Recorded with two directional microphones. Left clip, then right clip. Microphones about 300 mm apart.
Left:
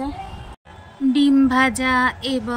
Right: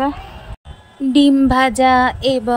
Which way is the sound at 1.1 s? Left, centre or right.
Centre.